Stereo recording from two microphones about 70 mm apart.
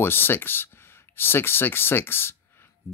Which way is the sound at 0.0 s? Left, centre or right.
Left.